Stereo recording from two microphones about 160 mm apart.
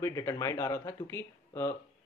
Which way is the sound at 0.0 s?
20° left (ahead or behind).